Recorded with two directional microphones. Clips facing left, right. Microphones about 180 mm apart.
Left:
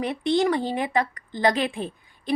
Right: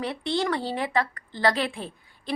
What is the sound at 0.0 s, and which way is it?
Speech, 20° left (ahead or behind).